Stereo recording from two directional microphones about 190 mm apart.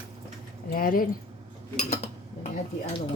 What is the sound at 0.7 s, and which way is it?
Speech, 50° left (ahead or behind).